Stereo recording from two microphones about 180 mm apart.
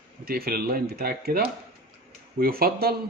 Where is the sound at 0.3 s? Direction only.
55° right (ahead or behind).